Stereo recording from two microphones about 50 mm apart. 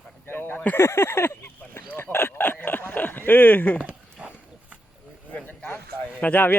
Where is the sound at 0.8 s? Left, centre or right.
Left.